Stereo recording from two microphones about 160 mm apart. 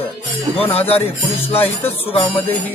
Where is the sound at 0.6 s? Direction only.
40° left (ahead or behind).